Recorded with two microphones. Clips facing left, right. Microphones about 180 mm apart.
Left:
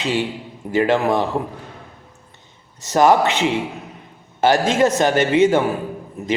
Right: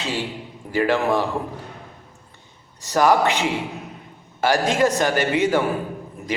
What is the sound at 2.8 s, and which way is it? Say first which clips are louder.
A man's voice: left 3 dB; 20° left (ahead or behind).